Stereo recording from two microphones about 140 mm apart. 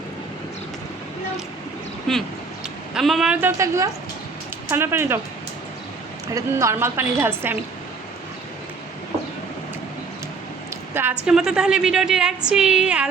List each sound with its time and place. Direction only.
2.1 s a woman's voice: centre (ahead or behind)
3.4 s a woman's voice: 20° right (ahead or behind)
6.2 s a woman's voice: 20° right (ahead or behind)
11.3 s a woman's voice: 5° right (ahead or behind)